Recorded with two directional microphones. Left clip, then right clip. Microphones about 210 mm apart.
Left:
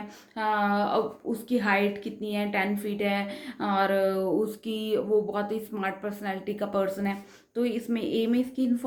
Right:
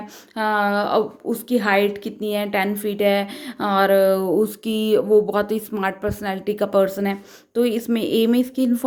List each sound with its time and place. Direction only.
0.3 s a woman's voice: 50° right (ahead or behind)